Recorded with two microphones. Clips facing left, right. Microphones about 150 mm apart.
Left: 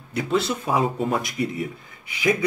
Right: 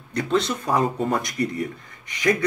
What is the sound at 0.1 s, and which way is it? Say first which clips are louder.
Speech: right 1 dB; 5° left (ahead or behind).